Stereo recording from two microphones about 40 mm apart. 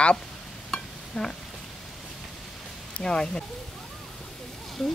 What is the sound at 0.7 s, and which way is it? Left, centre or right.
Stir, centre.